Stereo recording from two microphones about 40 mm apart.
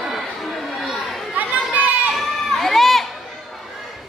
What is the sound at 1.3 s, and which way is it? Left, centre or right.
Chatter, right.